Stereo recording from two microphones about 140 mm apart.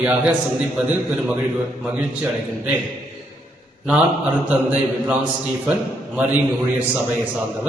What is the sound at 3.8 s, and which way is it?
A man's voice, 10° right (ahead or behind).